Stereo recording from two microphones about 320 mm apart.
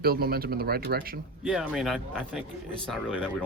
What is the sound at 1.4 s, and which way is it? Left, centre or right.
Speech, centre.